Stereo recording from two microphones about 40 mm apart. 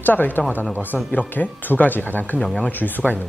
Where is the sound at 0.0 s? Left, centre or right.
Left.